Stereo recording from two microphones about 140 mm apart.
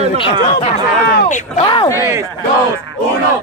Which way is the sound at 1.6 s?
35° left (ahead or behind).